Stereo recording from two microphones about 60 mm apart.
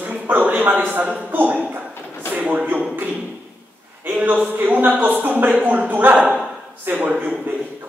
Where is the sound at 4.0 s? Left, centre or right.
Right.